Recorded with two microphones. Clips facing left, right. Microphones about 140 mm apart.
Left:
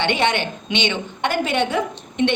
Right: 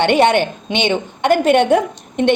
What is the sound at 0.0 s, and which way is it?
A woman's voice, 50° right (ahead or behind).